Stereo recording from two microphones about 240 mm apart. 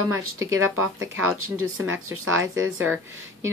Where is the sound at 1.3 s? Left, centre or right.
Right.